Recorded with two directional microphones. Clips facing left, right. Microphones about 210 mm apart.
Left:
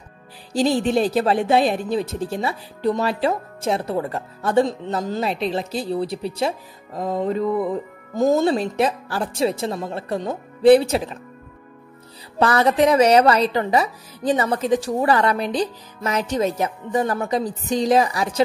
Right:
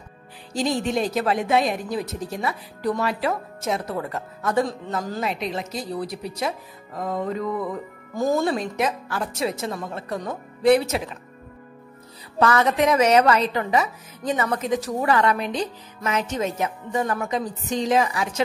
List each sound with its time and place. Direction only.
0.5 s speech: 35° left (ahead or behind)
12.4 s a woman's voice: 35° left (ahead or behind)